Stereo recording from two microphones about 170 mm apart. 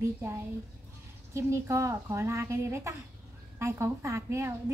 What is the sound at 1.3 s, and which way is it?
A woman's voice, 15° right (ahead or behind).